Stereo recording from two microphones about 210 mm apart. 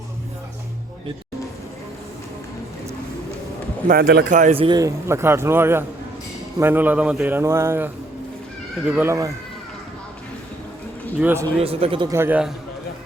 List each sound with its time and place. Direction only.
3.8 s a man's voice: 50° right (ahead or behind)
4.4 s a man's voice: 30° right (ahead or behind); by 7.9 s 10° right (ahead or behind)
8.9 s a man's voice: 10° right (ahead or behind)
11.2 s a man's voice: 10° right (ahead or behind)
11.6 s speech: 25° right (ahead or behind); by 12.5 s 10° right (ahead or behind)